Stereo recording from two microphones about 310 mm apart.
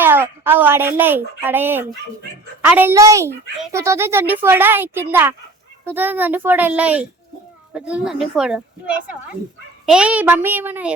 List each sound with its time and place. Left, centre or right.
0.0 s a woman's voice: centre